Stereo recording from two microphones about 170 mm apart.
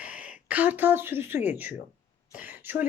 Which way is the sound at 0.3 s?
10° right (ahead or behind).